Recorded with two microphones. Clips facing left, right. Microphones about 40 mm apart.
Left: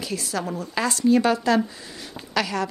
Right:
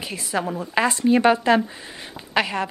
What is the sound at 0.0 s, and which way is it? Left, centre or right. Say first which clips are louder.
Speech: right 2 dB; right.